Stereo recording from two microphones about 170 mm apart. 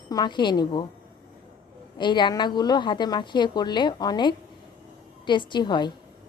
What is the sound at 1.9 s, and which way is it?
A woman's voice, 25° left (ahead or behind).